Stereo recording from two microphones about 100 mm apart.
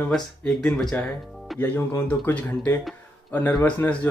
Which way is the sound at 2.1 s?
15° left (ahead or behind).